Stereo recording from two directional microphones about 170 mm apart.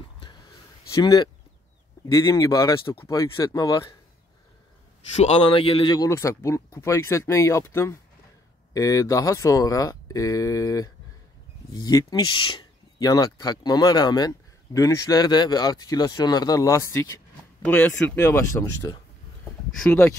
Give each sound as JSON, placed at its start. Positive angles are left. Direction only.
{"t": 0.8, "sound": "speech", "side_deg": 20}
{"t": 5.1, "sound": "speech", "side_deg": 40}